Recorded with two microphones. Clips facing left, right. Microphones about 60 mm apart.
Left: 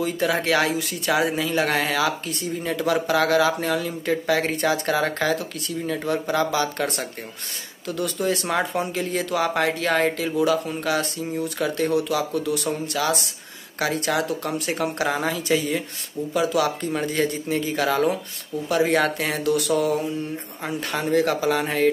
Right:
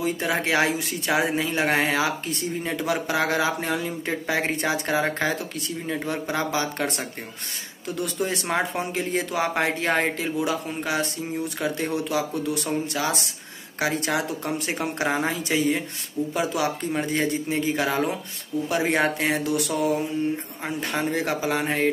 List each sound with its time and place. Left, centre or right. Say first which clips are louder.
0.0 s speech: left 2 dB; right